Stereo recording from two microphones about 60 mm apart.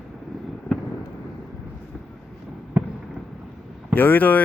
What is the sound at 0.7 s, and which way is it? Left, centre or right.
Fireworks, left.